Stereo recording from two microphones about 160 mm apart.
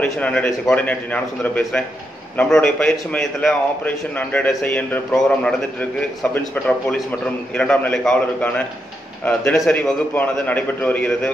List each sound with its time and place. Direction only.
0.0 s a man's voice: 5° left (ahead or behind)